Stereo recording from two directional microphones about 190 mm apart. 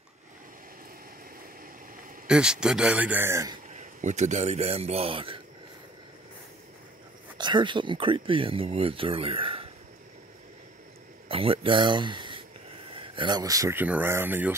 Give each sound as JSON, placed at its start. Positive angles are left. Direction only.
{"t": 2.2, "sound": "speech", "side_deg": -5}
{"t": 3.7, "sound": "speech", "side_deg": -40}
{"t": 7.3, "sound": "speech", "side_deg": -25}
{"t": 11.2, "sound": "speech", "side_deg": -30}